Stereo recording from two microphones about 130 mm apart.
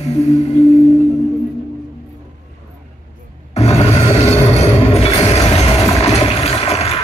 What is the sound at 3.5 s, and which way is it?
Music, 55° left (ahead or behind).